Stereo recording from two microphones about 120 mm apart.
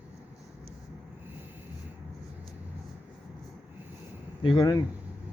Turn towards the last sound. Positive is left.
turn(degrees=35)  # may be behind; listen again after turning